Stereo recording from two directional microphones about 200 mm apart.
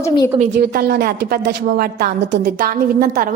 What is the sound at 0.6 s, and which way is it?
A woman's voice, 50° right (ahead or behind).